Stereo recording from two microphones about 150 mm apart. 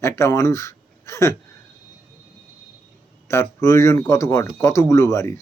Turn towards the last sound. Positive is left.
turn(degrees=20)  # may be behind; listen again after turning